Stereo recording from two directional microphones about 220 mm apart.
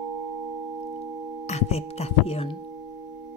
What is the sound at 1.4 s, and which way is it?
Speech, 30° left (ahead or behind).